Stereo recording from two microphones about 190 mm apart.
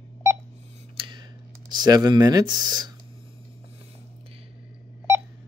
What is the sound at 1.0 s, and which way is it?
Speech, 25° right (ahead or behind).